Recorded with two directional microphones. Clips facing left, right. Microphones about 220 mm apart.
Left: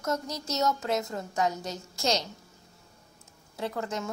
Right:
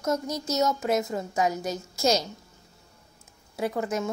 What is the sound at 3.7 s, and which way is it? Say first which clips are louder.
Speech: right 5 dB; 20° right (ahead or behind).